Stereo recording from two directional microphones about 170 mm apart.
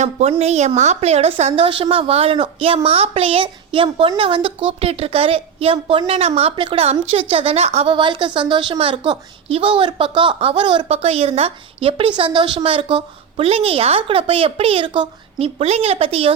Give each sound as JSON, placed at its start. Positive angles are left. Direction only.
{"t": 0.0, "sound": "a woman's voice", "side_deg": -40}